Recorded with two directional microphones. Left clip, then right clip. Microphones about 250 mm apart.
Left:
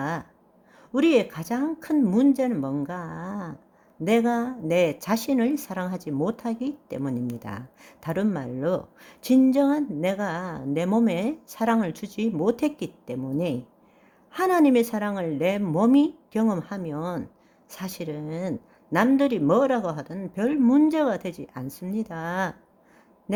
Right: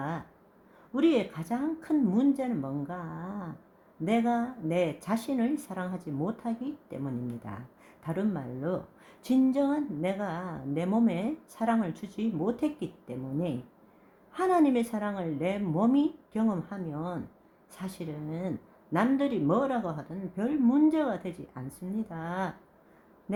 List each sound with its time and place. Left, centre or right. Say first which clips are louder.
0.9 s speech: left 6 dB; left